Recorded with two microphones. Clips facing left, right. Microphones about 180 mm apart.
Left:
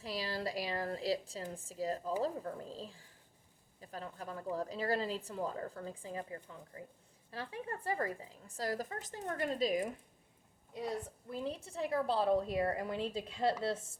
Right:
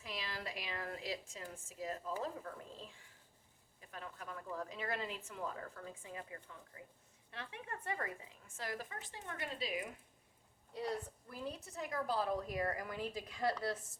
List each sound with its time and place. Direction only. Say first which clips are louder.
0.0 s a sound: left 7 dB; 35° left (ahead or behind)
1.5 s a woman's voice: left 6 dB; 35° left (ahead or behind)
11.3 s a woman's voice: left 6 dB; 25° left (ahead or behind)